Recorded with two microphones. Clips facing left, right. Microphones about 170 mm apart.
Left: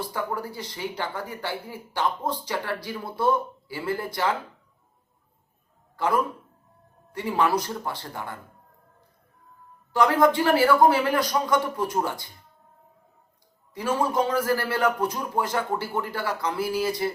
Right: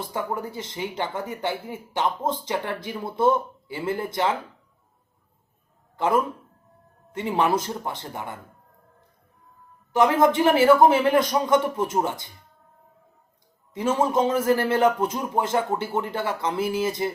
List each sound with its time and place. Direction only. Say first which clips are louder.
0.1 s speech: right 1 dB; 20° right (ahead or behind)
6.0 s speech: right 2 dB; 20° right (ahead or behind)
9.9 s speech: right 1 dB; 20° right (ahead or behind)
13.7 s speech: right 2 dB; 20° right (ahead or behind)